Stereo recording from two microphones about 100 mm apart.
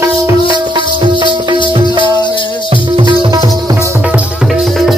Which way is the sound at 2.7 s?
50° right (ahead or behind).